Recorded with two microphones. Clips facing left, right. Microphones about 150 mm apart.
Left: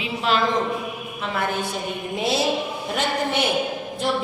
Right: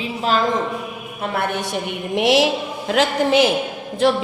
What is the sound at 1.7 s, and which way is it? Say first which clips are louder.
A woman's voice: right 5 dB; 85° right.